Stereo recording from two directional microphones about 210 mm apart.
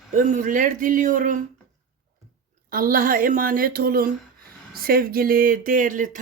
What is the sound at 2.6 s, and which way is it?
A woman's voice, 40° right (ahead or behind).